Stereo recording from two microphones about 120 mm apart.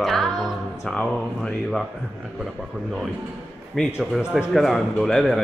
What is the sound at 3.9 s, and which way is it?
A man's voice, 5° right (ahead or behind).